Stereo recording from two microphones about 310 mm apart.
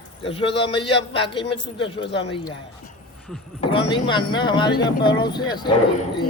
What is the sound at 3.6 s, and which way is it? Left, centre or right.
A man's voice, centre.